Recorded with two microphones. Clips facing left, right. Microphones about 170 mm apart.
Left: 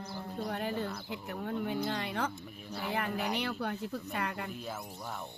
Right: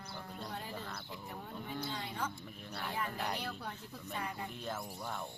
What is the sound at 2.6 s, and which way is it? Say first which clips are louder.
Speech: left 5 dB; 10° left (ahead or behind).